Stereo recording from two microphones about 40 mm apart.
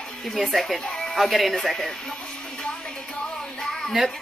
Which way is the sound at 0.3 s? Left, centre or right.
Centre.